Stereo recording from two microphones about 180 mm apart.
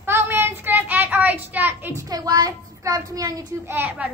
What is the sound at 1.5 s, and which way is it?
A child's voice, 10° right (ahead or behind).